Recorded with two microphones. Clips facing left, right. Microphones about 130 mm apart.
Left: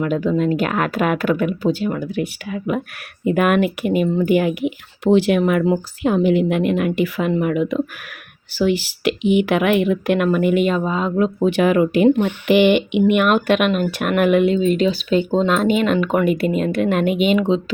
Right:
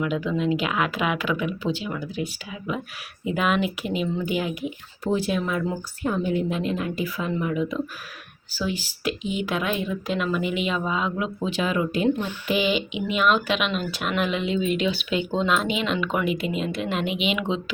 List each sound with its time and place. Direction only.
0.0 s speech: 45° left (ahead or behind); by 5.7 s 65° left (ahead or behind)
6.0 s a woman's voice: 90° left; by 11.4 s 40° left (ahead or behind)
11.4 s speech: 65° left (ahead or behind)
14.6 s speech: 40° left (ahead or behind)
17.3 s speech: 35° left (ahead or behind)